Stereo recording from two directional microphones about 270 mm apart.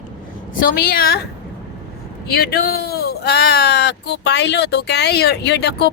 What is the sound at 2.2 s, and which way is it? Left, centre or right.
Speech, left.